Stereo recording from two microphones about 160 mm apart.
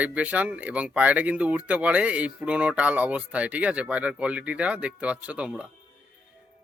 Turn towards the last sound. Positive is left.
turn(degrees=-5)  # may be behind; listen again after turning